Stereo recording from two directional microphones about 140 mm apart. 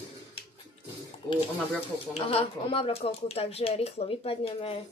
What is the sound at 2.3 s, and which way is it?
Speech, 40° left (ahead or behind).